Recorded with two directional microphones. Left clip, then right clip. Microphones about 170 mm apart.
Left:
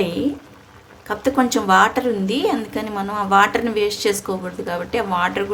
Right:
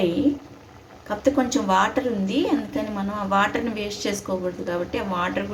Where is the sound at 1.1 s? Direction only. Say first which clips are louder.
Left 3 dB; 65° left (ahead or behind).